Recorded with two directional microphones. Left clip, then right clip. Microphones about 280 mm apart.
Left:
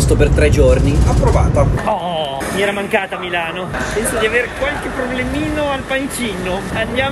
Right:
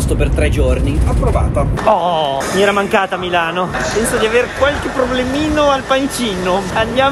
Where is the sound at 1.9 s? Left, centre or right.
Right.